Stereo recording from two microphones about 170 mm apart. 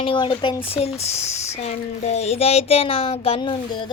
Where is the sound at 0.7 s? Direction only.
40° left (ahead or behind).